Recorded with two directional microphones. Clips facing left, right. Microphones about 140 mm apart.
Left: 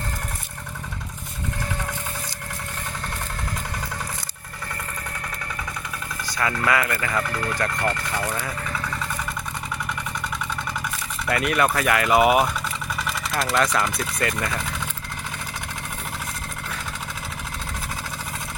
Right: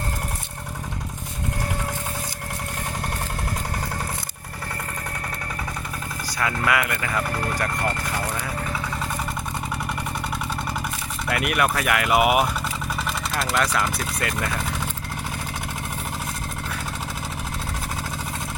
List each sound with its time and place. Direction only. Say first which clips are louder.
6.6 s speech: left 1 dB; 10° right (ahead or behind)
7.3 s speech: right 1 dB; 35° right (ahead or behind)
11.3 s speech: left 1 dB; 5° right (ahead or behind)